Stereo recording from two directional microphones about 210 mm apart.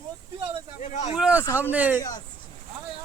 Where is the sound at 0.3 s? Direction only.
25° right (ahead or behind).